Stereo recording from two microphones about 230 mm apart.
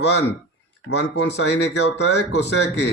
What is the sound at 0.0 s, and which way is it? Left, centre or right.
Speech, left.